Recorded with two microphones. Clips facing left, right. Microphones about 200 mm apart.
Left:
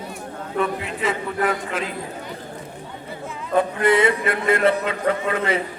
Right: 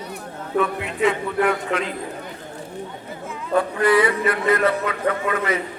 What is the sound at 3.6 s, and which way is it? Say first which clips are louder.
Speech: even; 25° left (ahead or behind).